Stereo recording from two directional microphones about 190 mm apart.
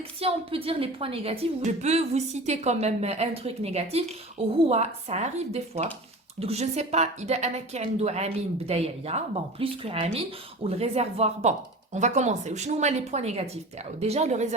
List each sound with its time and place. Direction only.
0.2 s a woman's voice: 30° right (ahead or behind)